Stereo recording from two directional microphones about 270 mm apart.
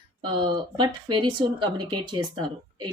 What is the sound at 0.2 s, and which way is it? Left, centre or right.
Speech, centre.